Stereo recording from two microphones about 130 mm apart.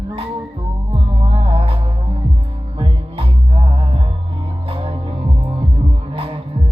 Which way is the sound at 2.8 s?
50° right (ahead or behind).